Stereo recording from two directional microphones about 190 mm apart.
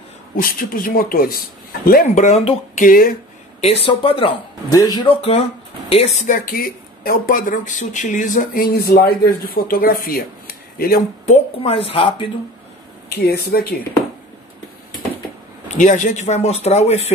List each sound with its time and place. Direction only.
0.4 s speech: 50° left (ahead or behind)
3.6 s speech: 30° left (ahead or behind); by 11.0 s 50° left (ahead or behind)
11.2 s speech: 35° left (ahead or behind)
13.2 s speech: 55° left (ahead or behind)
15.7 s speech: 40° left (ahead or behind)